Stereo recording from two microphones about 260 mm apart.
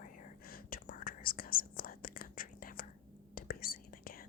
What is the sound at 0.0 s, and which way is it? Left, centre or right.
Whispering, left.